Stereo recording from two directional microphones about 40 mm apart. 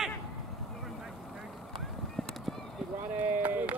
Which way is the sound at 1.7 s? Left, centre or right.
Centre.